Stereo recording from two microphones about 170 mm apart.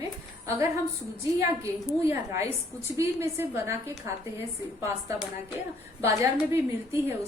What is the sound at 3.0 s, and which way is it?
A woman's voice, 15° right (ahead or behind).